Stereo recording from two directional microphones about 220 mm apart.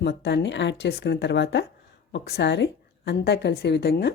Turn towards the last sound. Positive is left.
turn(degrees=50)  # may be behind; listen again after turning